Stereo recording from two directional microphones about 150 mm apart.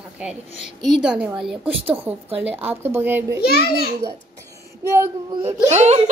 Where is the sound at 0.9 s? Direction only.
5° right (ahead or behind).